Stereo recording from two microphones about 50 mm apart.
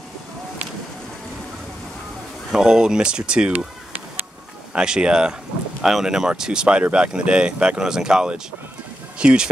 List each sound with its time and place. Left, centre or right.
2.5 s speech: centre
4.7 s speech: centre